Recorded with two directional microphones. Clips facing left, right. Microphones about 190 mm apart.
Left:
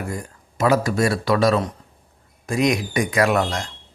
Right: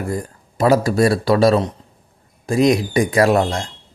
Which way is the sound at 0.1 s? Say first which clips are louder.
Right 6 dB; 35° right (ahead or behind).